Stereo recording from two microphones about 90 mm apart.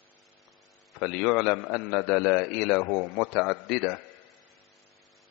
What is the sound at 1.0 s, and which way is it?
A man's voice, 5° left (ahead or behind).